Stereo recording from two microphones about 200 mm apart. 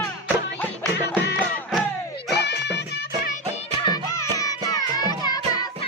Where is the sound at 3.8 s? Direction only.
15° left (ahead or behind).